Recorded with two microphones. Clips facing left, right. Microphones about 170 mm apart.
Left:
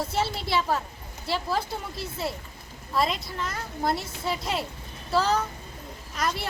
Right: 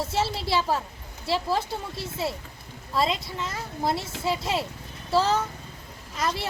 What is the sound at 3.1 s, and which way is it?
Speech, centre (ahead or behind).